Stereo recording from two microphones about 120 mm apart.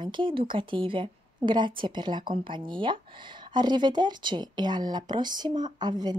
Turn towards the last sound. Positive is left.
turn(degrees=-35)  # may be behind; listen again after turning